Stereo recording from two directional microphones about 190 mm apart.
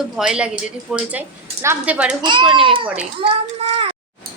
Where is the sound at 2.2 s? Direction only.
25° right (ahead or behind).